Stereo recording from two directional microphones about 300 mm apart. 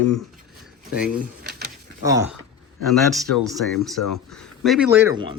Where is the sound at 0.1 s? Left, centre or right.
Centre.